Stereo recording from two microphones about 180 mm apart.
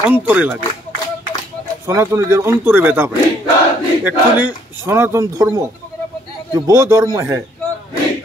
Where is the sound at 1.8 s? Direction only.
15° right (ahead or behind).